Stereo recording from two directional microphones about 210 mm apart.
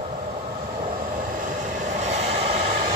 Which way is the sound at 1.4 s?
35° right (ahead or behind).